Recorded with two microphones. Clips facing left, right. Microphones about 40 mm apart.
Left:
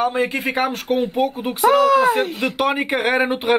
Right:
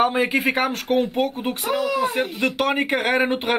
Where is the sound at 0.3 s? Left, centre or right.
Centre.